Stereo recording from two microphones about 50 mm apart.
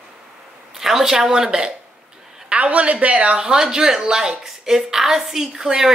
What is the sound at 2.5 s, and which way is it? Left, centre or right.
Speech, right.